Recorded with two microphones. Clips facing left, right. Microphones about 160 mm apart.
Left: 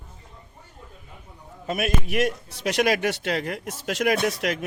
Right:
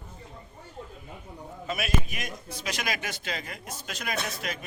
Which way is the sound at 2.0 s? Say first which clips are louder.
Left 14 dB; 70° left (ahead or behind).